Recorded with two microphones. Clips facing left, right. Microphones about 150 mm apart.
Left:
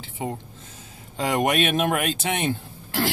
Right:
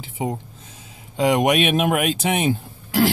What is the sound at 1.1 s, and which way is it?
Speech, 10° right (ahead or behind).